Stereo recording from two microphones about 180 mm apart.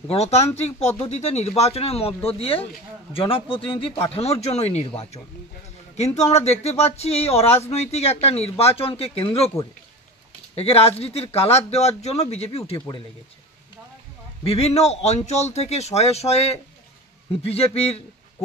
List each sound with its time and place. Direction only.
0.1 s speech: 35° left (ahead or behind)
10.5 s speech: 35° left (ahead or behind)
14.4 s speech: 35° left (ahead or behind)